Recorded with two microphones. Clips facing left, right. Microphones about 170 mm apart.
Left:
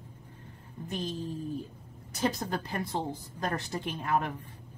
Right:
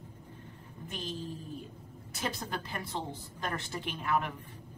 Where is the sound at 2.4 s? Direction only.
40° left (ahead or behind).